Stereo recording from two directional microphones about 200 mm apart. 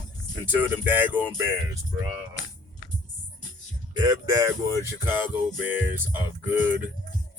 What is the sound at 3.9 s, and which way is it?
Speech, 20° right (ahead or behind).